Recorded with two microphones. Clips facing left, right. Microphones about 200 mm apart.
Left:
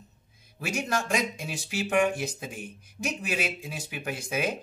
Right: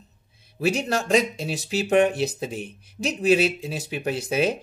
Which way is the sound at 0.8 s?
35° right (ahead or behind).